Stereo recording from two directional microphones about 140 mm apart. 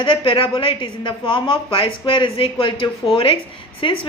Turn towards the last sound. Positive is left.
turn(degrees=40)  # may be behind; listen again after turning